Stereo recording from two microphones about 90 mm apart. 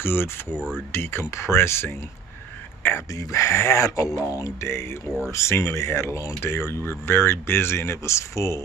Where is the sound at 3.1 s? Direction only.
40° left (ahead or behind).